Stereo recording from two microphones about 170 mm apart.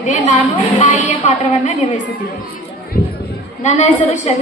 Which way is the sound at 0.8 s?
40° left (ahead or behind).